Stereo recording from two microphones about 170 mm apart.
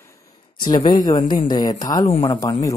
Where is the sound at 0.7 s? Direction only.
25° left (ahead or behind).